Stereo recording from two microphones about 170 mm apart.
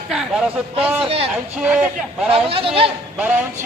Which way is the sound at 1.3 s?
10° right (ahead or behind).